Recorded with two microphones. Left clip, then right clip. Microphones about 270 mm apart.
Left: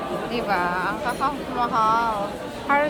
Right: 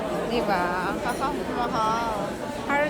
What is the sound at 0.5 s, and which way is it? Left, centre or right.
Speech, centre.